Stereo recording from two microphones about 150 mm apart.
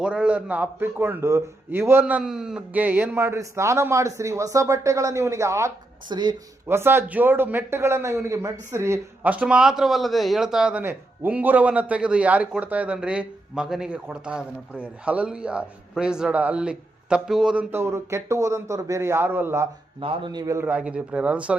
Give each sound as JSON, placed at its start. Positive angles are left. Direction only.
{"t": 0.0, "sound": "a man's voice", "side_deg": -10}
{"t": 6.1, "sound": "a man's voice", "side_deg": -30}
{"t": 6.7, "sound": "a man's voice", "side_deg": -15}
{"t": 20.0, "sound": "a man's voice", "side_deg": -35}
{"t": 20.7, "sound": "a man's voice", "side_deg": -10}